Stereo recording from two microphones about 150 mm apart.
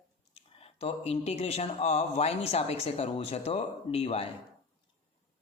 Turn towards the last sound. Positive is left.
turn(degrees=40)  # may be behind; listen again after turning